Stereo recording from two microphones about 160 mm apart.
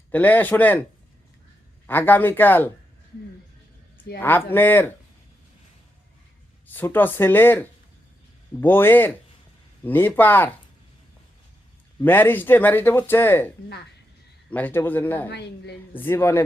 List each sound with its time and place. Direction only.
0.1 s speech: 10° left (ahead or behind)
1.9 s speech: 10° left (ahead or behind)
4.2 s speech: 15° left (ahead or behind)
6.7 s speech: 10° left (ahead or behind)
12.0 s speech: 10° left (ahead or behind)
14.5 s speech: 10° left (ahead or behind)
15.3 s a woman's voice: 90° left
16.0 s speech: 15° left (ahead or behind)